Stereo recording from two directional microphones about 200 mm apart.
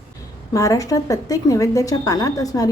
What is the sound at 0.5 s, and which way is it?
A woman's voice, 15° left (ahead or behind).